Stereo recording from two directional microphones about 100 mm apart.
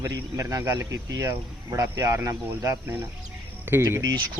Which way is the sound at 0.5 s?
35° right (ahead or behind).